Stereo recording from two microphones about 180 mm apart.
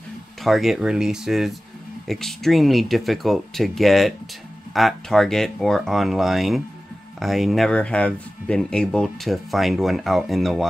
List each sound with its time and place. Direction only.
0.4 s speech: centre (ahead or behind)